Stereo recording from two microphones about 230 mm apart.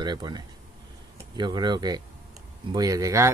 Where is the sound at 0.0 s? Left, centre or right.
Centre.